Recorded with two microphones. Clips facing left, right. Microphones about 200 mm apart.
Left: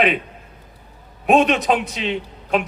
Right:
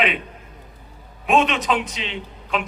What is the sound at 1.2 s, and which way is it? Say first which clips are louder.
A man's voice: left 4 dB; 45° left (ahead or behind).